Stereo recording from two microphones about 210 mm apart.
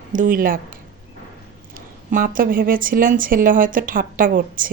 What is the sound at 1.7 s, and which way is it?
Speech, 40° right (ahead or behind).